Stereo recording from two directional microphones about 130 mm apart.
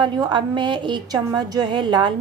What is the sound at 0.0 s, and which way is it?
A woman's voice, 35° right (ahead or behind).